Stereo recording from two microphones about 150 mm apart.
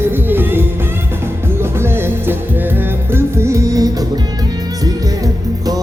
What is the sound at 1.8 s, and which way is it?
Music, 15° right (ahead or behind).